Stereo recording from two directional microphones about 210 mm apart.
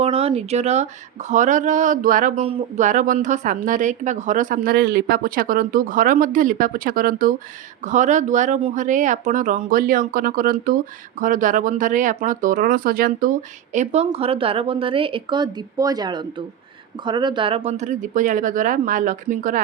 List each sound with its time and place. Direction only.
0.0 s speech: 30° right (ahead or behind)
13.7 s speech: 30° right (ahead or behind)